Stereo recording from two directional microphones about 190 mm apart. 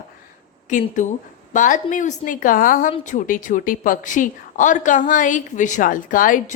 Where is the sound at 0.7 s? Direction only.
40° left (ahead or behind).